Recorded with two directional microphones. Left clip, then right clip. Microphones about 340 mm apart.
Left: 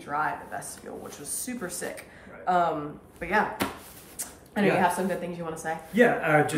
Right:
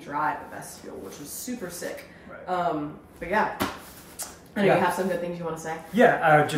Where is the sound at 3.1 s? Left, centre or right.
Centre.